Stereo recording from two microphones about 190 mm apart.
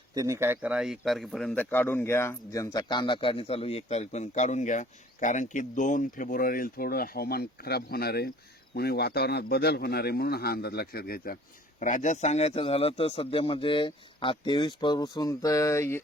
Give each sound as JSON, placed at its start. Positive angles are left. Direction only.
{"t": 0.1, "sound": "a man's voice", "side_deg": -15}
{"t": 11.8, "sound": "a man's voice", "side_deg": 40}